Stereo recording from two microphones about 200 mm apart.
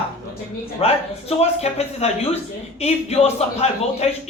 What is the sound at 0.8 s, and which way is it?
A man's voice, 30° left (ahead or behind).